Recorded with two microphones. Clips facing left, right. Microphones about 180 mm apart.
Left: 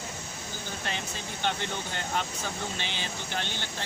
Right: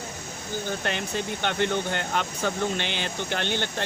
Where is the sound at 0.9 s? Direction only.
65° right (ahead or behind).